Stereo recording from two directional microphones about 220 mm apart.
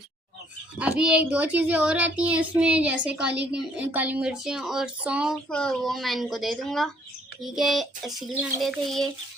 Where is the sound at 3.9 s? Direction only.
5° right (ahead or behind).